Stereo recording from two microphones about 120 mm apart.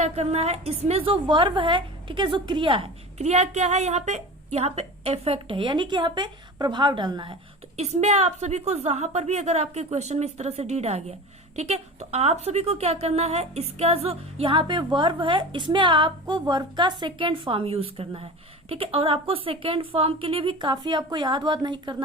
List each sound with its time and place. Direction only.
0.0 s a woman's voice: 65° right (ahead or behind); by 2.9 s 45° right (ahead or behind)
3.2 s a woman's voice: 70° right (ahead or behind); by 7.3 s 40° right (ahead or behind)
7.8 s a woman's voice: 70° right (ahead or behind); by 21.9 s 40° right (ahead or behind)